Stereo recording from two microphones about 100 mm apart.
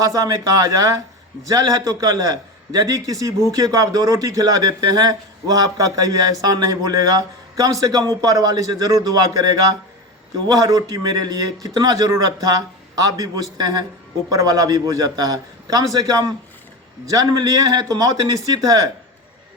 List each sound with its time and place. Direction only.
0.0 s a man's voice: 35° right (ahead or behind)